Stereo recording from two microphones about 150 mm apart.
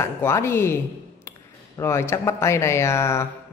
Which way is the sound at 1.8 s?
15° left (ahead or behind).